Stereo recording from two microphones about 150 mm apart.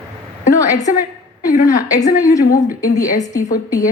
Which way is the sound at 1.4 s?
65° left (ahead or behind).